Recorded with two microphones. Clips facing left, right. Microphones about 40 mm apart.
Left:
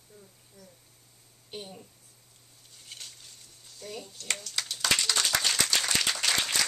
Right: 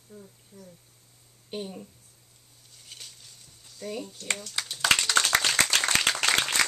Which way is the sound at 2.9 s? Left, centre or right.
Centre.